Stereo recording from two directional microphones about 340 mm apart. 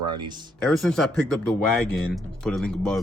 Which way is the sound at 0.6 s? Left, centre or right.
Centre.